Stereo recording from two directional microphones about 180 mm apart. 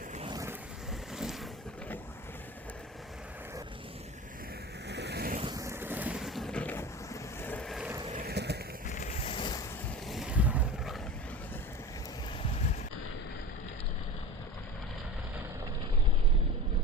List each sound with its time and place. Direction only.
0.2 s vehicle: 25° right (ahead or behind)
4.9 s vehicle: 70° right (ahead or behind)
5.4 s boat: 20° right (ahead or behind); by 7.9 s centre (ahead or behind)
8.1 s a sound: 60° right (ahead or behind)
8.9 s vehicle: 45° left (ahead or behind); by 9.6 s 25° left (ahead or behind)
10.1 s vehicle: 5° right (ahead or behind)